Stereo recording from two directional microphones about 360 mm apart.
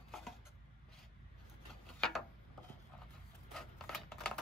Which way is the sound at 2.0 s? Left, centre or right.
Centre.